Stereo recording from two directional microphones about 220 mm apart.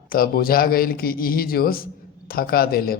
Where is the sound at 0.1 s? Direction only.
40° left (ahead or behind).